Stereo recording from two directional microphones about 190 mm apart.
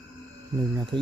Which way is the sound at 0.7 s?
25° right (ahead or behind).